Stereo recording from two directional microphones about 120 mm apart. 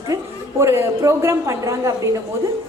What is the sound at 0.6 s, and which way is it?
A woman's voice, 20° right (ahead or behind).